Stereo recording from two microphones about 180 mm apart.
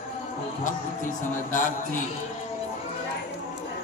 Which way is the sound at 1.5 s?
45° left (ahead or behind).